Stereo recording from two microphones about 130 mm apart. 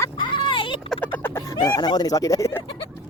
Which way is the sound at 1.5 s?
30° left (ahead or behind).